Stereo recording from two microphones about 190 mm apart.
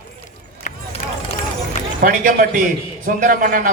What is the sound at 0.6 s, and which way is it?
Run, 35° left (ahead or behind).